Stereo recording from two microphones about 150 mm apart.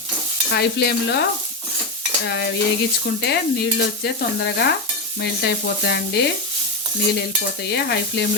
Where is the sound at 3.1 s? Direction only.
90° left.